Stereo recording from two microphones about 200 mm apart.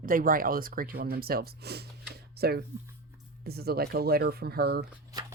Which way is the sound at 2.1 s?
50° right (ahead or behind).